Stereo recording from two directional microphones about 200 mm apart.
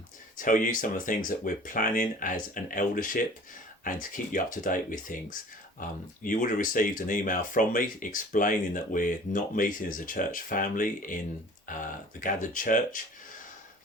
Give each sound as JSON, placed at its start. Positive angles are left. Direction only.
{"t": 0.3, "sound": "speech", "side_deg": 40}